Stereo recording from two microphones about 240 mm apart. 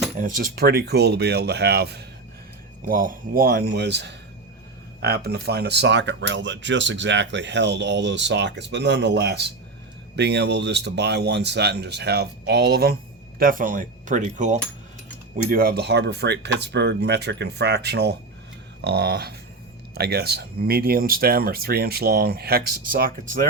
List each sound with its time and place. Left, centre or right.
0.2 s speech: right